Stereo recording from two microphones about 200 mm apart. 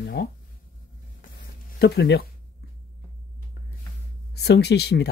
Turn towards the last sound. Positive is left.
turn(degrees=55)  # may be behind; listen again after turning